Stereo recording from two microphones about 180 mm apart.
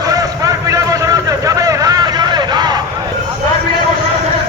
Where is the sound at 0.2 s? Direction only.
20° right (ahead or behind).